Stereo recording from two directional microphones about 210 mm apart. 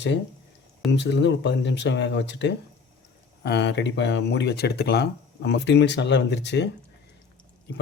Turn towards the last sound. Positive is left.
turn(degrees=55)  # may be behind; listen again after turning